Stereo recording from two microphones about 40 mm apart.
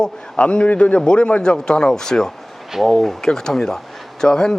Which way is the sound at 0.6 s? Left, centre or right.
Left.